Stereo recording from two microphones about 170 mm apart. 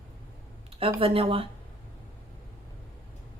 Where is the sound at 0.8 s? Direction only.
35° right (ahead or behind).